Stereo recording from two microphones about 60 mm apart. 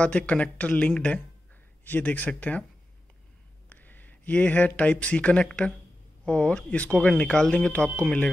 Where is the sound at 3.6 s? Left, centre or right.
Left.